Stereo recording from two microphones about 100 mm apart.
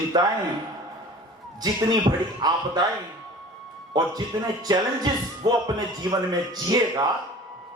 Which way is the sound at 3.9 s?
40° right (ahead or behind).